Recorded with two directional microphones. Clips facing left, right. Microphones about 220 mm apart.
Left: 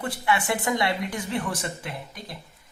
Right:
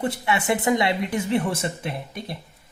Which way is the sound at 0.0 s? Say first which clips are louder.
Right 2 dB; 25° right (ahead or behind).